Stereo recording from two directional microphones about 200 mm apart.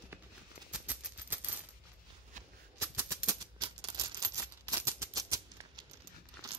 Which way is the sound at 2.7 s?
15° right (ahead or behind).